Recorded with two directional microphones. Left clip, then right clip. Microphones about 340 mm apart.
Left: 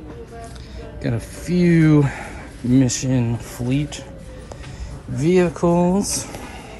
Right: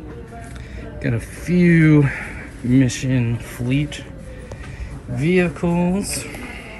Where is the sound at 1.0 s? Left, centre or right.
Centre.